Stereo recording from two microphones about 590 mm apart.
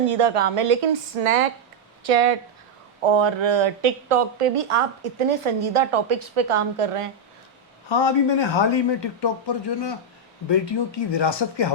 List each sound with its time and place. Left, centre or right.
0.1 s speech: right
3.0 s speech: right
7.9 s a man's voice: left
11.1 s a man's voice: left